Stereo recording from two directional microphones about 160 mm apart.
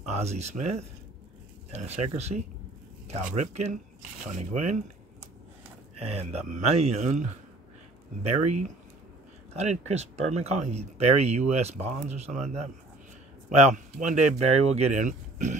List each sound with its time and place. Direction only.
0.2 s speech: 45° right (ahead or behind)
5.9 s speech: 45° right (ahead or behind)
9.6 s speech: 45° right (ahead or behind)
13.7 s speech: 50° right (ahead or behind)